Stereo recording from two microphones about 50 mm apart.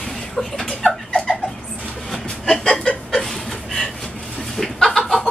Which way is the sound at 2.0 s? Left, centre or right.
Centre.